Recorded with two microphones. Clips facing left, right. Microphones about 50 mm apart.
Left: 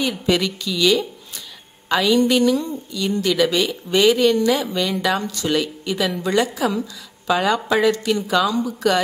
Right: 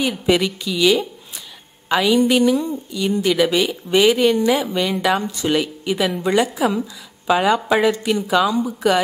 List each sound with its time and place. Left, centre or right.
0.0 s a woman's voice: centre